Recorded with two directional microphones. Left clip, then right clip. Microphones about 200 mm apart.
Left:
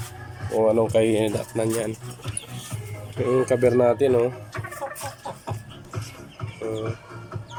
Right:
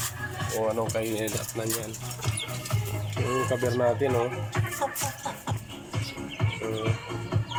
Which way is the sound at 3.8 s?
20° left (ahead or behind).